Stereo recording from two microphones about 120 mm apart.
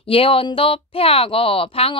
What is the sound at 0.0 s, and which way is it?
A woman's voice, 50° left (ahead or behind).